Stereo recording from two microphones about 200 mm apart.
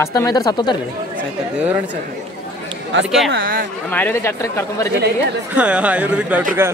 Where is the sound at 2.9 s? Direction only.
65° right (ahead or behind).